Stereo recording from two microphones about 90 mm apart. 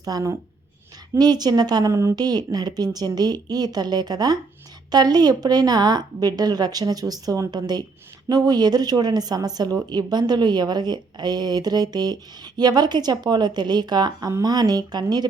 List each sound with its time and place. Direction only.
0.0 s a woman's voice: 40° right (ahead or behind)
2.1 s speech: 50° right (ahead or behind)